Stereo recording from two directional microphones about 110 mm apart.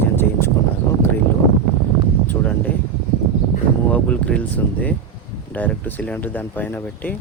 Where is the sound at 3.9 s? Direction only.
10° left (ahead or behind).